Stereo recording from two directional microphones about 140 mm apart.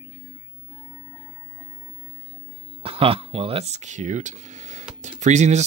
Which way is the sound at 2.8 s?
40° right (ahead or behind).